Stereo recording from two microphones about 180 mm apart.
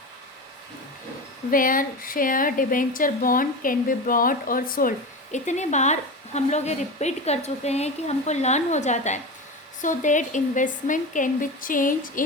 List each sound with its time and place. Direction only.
1.5 s a woman's voice: 50° left (ahead or behind)